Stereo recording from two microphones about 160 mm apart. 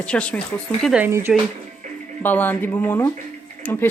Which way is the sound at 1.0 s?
15° right (ahead or behind).